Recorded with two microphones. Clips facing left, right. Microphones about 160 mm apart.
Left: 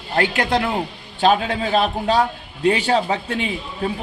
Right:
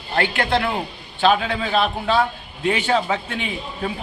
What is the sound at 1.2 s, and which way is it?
A man's voice, 40° left (ahead or behind).